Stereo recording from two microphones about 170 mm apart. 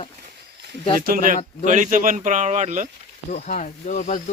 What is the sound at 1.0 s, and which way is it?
Speech, 55° right (ahead or behind).